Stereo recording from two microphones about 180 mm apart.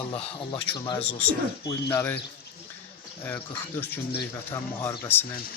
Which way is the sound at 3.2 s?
10° left (ahead or behind).